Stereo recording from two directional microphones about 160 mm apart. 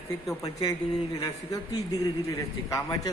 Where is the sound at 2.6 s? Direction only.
20° left (ahead or behind).